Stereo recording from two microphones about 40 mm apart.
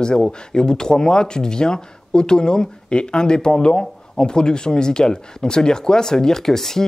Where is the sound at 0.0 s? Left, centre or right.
Centre.